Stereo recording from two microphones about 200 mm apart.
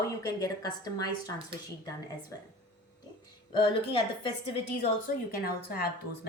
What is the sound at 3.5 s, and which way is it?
Speech, 25° left (ahead or behind).